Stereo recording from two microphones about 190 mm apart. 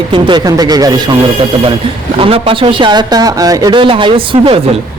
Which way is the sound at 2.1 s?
30° right (ahead or behind).